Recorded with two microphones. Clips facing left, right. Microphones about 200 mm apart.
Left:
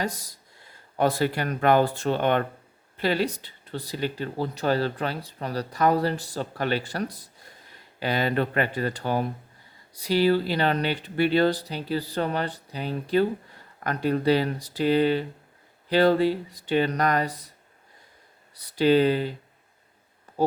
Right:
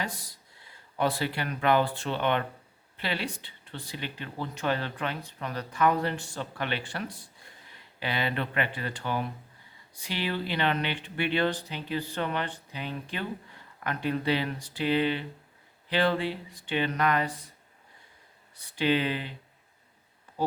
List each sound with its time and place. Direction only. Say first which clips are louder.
0.0 s speech: left 6 dB; 40° left (ahead or behind)
18.5 s speech: left 7 dB; 40° left (ahead or behind)
20.3 s a sound: left 7 dB; 40° left (ahead or behind)